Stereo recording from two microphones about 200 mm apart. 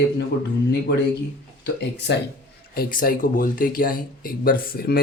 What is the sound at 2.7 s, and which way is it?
Speech, 45° left (ahead or behind).